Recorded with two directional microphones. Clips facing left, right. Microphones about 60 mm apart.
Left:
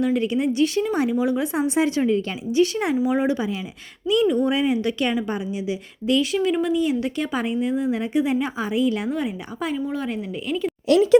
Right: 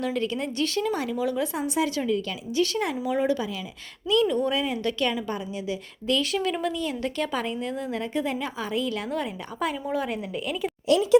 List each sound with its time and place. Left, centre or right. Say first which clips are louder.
0.0 s a woman's voice: left 6 dB; centre
2.9 s a woman's voice: left 4 dB; centre
9.1 s a woman's voice: left 3 dB; centre
10.8 s a woman's voice: left 4 dB; left